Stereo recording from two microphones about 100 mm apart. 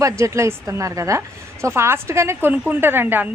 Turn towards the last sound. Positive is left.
turn(degrees=-20)  # may be behind; listen again after turning